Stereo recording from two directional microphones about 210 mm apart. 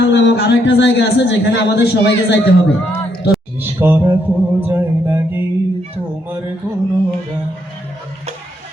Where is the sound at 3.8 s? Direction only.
10° right (ahead or behind).